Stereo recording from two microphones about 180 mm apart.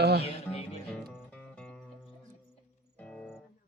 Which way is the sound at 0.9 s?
10° left (ahead or behind).